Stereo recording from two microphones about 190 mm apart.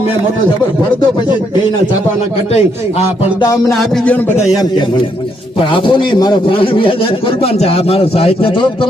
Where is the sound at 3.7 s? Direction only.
Centre (ahead or behind).